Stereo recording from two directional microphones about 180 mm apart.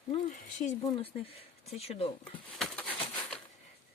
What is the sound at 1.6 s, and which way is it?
Speech, 35° left (ahead or behind).